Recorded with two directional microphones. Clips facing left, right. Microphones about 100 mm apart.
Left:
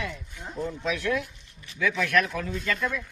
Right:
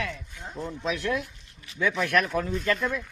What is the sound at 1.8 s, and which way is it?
Speech, 35° right (ahead or behind).